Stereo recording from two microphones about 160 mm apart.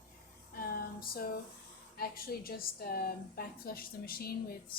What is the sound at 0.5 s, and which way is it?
A woman's voice, 70° left (ahead or behind).